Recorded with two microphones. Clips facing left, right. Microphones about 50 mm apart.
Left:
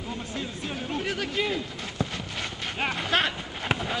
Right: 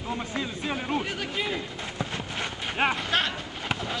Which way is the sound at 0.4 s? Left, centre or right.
Right.